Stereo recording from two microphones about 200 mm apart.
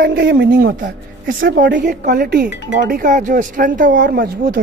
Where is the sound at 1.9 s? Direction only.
45° right (ahead or behind).